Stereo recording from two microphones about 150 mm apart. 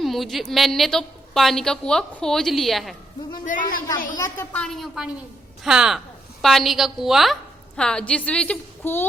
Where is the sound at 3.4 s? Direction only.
65° left (ahead or behind).